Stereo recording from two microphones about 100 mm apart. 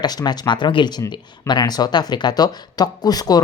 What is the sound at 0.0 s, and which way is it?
Speech, 45° left (ahead or behind).